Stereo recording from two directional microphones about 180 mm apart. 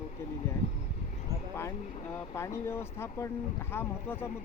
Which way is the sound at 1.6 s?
10° left (ahead or behind).